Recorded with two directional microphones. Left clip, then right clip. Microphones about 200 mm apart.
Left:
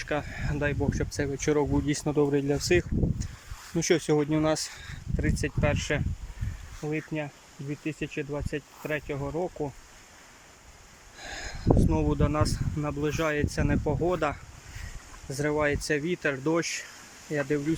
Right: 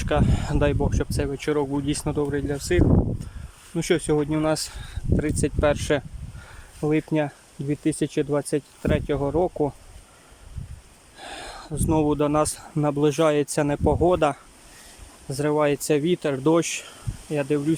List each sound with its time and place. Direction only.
0.0 s speech: 15° right (ahead or behind)
11.2 s speech: 10° right (ahead or behind)